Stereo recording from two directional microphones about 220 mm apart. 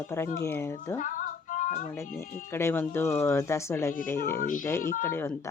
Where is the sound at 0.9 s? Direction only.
35° left (ahead or behind).